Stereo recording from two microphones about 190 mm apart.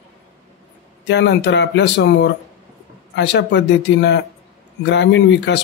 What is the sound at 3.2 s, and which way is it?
Speech, 65° left (ahead or behind).